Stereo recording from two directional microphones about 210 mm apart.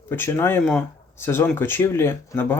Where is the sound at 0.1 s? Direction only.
10° left (ahead or behind).